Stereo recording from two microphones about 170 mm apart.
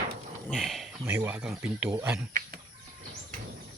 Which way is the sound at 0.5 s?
Centre (ahead or behind).